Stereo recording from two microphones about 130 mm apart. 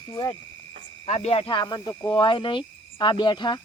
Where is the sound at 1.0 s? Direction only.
55° left (ahead or behind); by 3.6 s 35° left (ahead or behind).